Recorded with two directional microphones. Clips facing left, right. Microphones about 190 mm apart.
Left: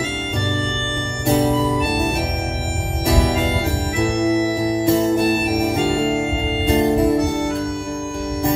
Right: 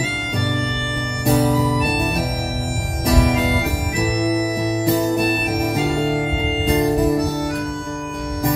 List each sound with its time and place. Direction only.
1.2 s music: 25° left (ahead or behind)
3.1 s music: 25° left (ahead or behind)